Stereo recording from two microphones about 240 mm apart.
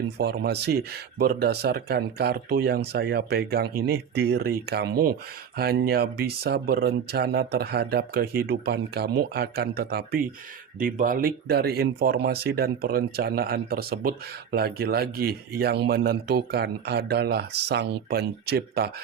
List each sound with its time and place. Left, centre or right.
0.2 s speech: right